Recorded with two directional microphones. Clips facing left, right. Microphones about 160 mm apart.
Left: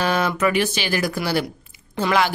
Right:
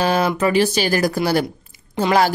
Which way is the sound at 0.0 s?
35° right (ahead or behind).